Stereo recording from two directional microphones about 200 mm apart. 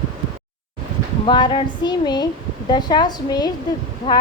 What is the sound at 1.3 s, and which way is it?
A woman's voice, 25° left (ahead or behind).